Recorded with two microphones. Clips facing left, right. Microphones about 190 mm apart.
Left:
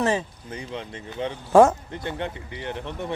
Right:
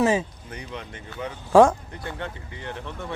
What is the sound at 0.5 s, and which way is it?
Speech, 30° left (ahead or behind).